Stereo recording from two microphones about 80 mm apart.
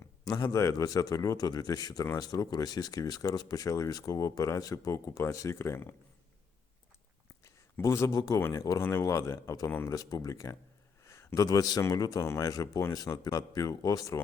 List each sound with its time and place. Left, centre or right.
0.3 s speech: left
7.4 s a sound: left
8.1 s speech: left
8.5 s speech: left
8.8 s speech: left
9.9 s speech: left
11.0 s a sound: left
11.3 s speech: left
12.2 s speech: left